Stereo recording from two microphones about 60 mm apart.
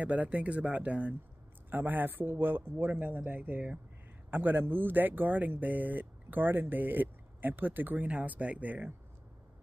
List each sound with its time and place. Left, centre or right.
0.0 s speech: right